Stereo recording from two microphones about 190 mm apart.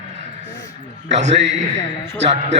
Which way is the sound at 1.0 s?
35° right (ahead or behind).